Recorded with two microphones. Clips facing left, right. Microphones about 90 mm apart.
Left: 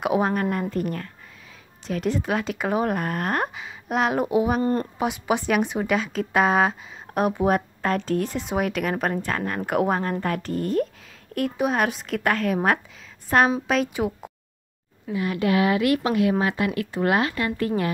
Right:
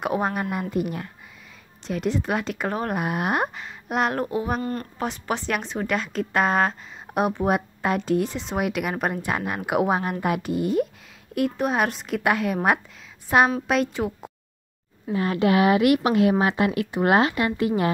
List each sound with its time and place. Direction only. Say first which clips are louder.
0.0 s a woman's voice: left 3 dB; centre (ahead or behind)
2.9 s a woman's voice: right 1 dB; 10° right (ahead or behind)
3.5 s speech: left 1 dB; centre (ahead or behind)
4.2 s speech: left 4 dB; 10° left (ahead or behind)
4.6 s a woman's voice: left 6 dB; 25° left (ahead or behind)
4.9 s a woman's voice: left 3 dB; 10° left (ahead or behind)
15.0 s speech: right 2 dB; 35° right (ahead or behind)